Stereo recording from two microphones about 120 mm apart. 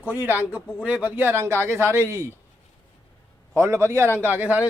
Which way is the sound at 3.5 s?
20° right (ahead or behind).